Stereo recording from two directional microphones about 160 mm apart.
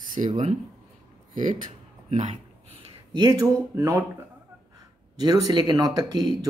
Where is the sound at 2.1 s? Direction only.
45° right (ahead or behind).